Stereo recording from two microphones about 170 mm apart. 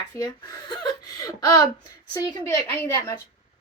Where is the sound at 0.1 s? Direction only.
20° left (ahead or behind).